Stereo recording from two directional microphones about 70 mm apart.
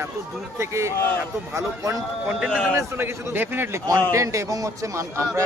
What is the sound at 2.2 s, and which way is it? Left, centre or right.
Speech, centre.